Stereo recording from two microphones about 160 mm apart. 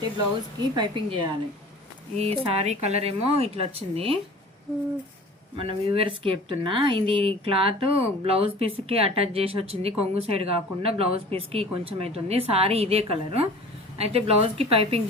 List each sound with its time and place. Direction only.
0.8 s a woman's voice: 30° right (ahead or behind)
2.1 s speech: 40° right (ahead or behind)
5.5 s speech: 35° right (ahead or behind)